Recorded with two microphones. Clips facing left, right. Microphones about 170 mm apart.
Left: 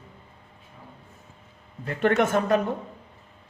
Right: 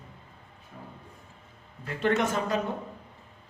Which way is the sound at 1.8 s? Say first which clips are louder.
Left 4 dB; 55° left (ahead or behind).